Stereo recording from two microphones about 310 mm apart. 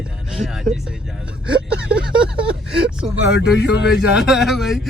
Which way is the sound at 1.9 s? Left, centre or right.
Centre.